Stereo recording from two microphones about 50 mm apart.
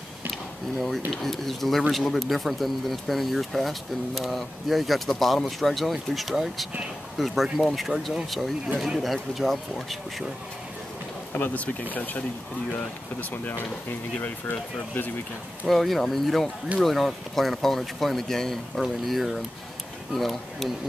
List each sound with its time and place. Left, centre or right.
0.7 s speech: centre
11.3 s speech: left
15.6 s speech: centre